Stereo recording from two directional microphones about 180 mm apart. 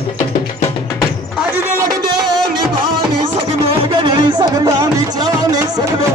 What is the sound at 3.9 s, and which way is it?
Music, 25° right (ahead or behind).